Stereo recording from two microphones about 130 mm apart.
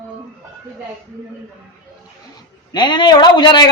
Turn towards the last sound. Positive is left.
turn(degrees=35)  # may be behind; listen again after turning